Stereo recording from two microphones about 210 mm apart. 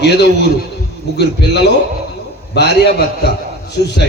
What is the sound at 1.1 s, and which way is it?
A man's voice, 55° left (ahead or behind).